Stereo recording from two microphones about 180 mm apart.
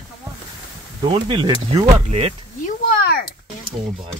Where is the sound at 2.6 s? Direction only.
60° left (ahead or behind).